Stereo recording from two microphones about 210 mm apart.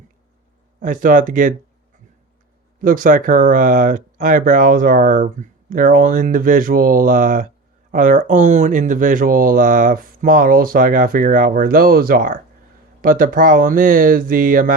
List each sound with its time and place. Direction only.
0.8 s speech: 40° right (ahead or behind)
2.8 s speech: 40° right (ahead or behind)